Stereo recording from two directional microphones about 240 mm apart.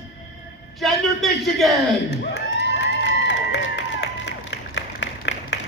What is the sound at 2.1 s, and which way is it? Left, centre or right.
Crowd, left.